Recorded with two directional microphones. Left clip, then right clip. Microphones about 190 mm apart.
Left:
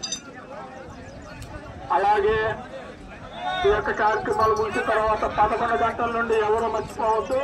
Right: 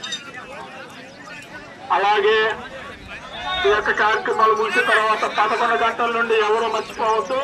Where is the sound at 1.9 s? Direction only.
55° left (ahead or behind).